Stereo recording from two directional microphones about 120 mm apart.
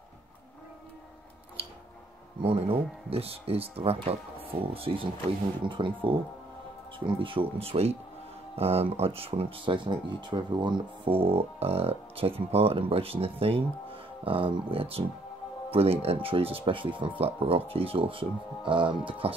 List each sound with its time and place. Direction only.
2.4 s speech: 50° right (ahead or behind)